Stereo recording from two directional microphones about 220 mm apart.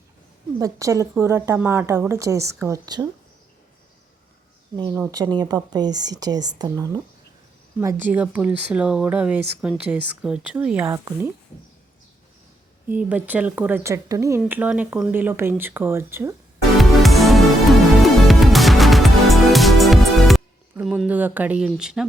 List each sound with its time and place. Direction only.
0.6 s speech: 15° right (ahead or behind)
4.8 s speech: 20° right (ahead or behind)
12.9 s speech: 5° right (ahead or behind)
16.7 s music: centre (ahead or behind)